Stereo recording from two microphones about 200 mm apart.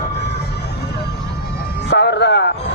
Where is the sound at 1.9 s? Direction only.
55° left (ahead or behind).